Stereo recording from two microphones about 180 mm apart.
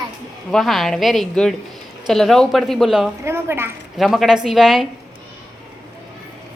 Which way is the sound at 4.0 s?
Centre (ahead or behind).